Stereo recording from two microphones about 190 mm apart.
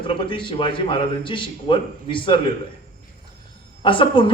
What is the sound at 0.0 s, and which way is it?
A man's voice, 25° left (ahead or behind).